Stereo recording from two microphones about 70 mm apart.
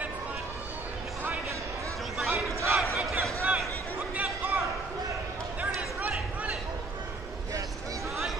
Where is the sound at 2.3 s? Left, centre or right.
Right.